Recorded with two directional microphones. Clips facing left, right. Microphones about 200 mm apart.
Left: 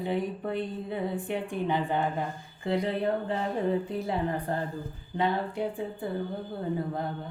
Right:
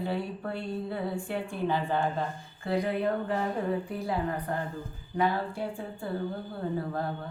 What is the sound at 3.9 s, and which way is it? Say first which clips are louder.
A woman's voice: left 1 dB; 25° left (ahead or behind).